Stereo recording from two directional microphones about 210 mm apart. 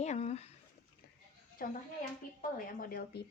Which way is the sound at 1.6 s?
45° left (ahead or behind).